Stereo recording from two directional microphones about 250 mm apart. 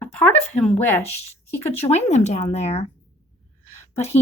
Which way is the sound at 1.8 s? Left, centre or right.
Left.